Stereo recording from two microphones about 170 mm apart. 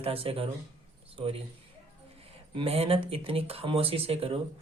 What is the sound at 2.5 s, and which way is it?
Speech, 35° right (ahead or behind).